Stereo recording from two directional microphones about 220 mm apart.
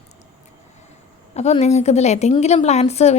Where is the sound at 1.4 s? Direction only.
30° left (ahead or behind).